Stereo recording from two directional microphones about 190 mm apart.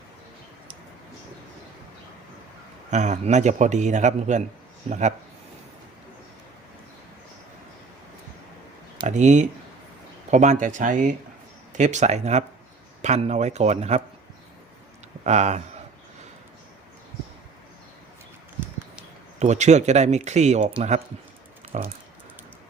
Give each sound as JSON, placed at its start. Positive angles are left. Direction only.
{"t": 2.9, "sound": "speech", "side_deg": -40}
{"t": 9.0, "sound": "speech", "side_deg": -40}
{"t": 15.2, "sound": "speech", "side_deg": -35}
{"t": 19.4, "sound": "speech", "side_deg": -35}